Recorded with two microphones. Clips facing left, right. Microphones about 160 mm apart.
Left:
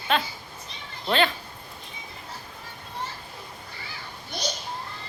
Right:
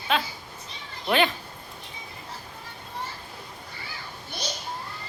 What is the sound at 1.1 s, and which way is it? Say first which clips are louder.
Speech: even; 15° right (ahead or behind).